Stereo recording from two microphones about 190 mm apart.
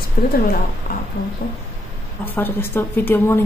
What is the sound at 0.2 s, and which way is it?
Speech, 50° left (ahead or behind).